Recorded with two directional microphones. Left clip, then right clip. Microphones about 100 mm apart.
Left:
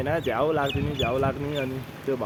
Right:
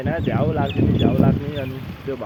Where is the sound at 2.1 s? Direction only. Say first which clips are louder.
Even; 20° left (ahead or behind).